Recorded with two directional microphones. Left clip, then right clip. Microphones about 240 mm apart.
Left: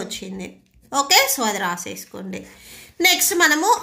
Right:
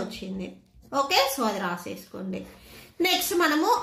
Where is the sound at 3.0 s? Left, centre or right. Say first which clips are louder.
Left 7 dB; left.